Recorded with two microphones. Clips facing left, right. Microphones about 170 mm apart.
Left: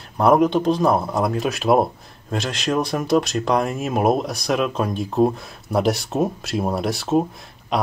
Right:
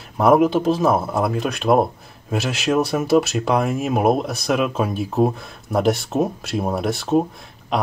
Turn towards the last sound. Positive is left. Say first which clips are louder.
# even
turn(degrees=0)  # may be behind; listen again after turning